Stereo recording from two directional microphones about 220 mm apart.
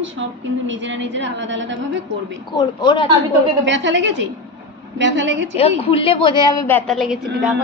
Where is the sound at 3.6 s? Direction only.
55° right (ahead or behind).